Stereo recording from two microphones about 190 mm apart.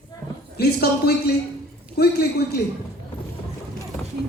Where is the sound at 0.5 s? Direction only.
55° left (ahead or behind).